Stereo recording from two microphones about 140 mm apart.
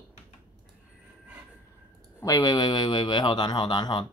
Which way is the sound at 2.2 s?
25° left (ahead or behind).